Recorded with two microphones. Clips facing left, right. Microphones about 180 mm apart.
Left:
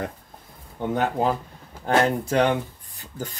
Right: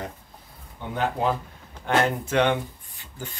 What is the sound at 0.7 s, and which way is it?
Speech, 45° left (ahead or behind).